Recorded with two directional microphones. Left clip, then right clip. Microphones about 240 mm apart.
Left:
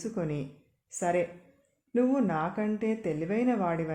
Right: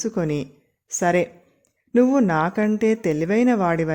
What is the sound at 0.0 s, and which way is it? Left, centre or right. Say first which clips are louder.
Speech: right 10 dB; right.